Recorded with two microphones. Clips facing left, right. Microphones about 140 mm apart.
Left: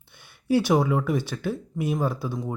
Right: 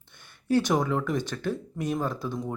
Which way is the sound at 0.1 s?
10° left (ahead or behind).